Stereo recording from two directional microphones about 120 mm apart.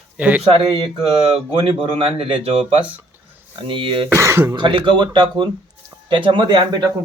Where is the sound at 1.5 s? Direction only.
50° right (ahead or behind).